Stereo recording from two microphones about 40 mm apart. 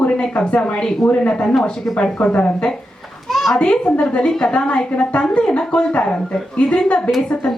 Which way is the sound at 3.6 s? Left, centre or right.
Left.